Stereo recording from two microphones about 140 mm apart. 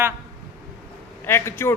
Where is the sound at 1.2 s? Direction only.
15° left (ahead or behind).